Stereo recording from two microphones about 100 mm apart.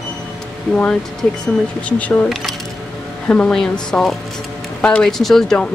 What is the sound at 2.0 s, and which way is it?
Speech, 15° left (ahead or behind).